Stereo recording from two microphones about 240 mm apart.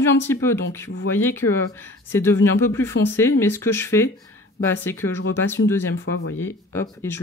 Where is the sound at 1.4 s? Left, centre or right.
Left.